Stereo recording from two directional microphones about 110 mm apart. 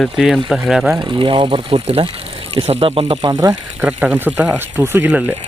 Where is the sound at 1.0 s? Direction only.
50° right (ahead or behind).